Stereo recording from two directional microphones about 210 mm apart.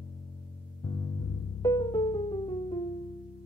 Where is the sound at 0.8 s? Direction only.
15° left (ahead or behind).